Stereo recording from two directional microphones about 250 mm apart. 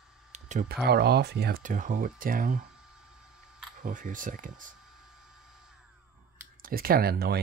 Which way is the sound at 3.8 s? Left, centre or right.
Right.